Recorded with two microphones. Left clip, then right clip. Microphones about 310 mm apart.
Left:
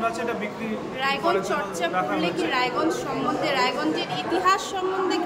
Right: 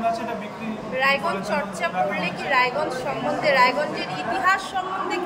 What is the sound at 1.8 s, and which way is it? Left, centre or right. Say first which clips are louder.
Speech: even; centre.